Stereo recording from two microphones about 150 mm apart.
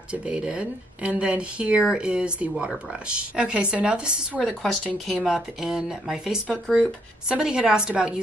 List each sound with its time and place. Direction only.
0.1 s a woman's voice: 5° right (ahead or behind)